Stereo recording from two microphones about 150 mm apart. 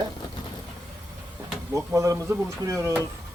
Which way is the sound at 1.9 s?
20° right (ahead or behind).